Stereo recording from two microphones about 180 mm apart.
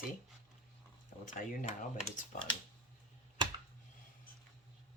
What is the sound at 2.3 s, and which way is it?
Speech, 45° left (ahead or behind).